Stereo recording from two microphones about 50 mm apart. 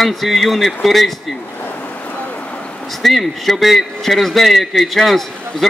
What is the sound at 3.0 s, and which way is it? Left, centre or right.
A man's voice, centre.